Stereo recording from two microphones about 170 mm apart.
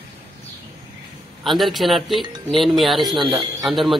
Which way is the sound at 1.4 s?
Centre (ahead or behind).